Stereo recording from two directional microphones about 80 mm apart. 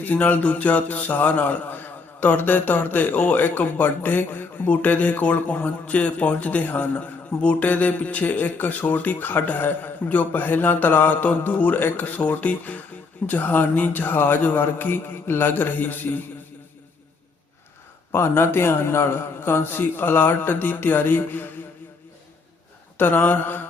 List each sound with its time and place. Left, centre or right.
0.0 s speech: left
18.1 s speech: left
23.0 s speech: left